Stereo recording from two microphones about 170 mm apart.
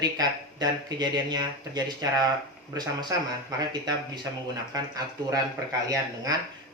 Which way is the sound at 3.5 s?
25° right (ahead or behind).